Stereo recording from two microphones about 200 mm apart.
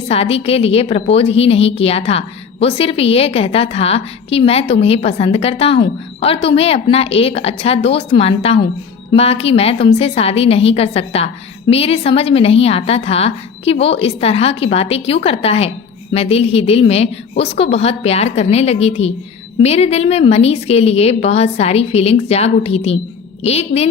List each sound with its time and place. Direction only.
0.1 s a woman's voice: 30° left (ahead or behind)